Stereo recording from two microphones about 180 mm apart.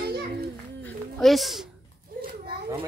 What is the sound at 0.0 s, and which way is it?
Children playing, 60° right (ahead or behind).